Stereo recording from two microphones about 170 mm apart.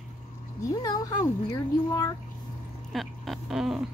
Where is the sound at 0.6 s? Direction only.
25° left (ahead or behind).